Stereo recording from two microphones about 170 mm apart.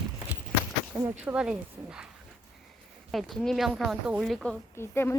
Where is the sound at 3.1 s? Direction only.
Centre (ahead or behind).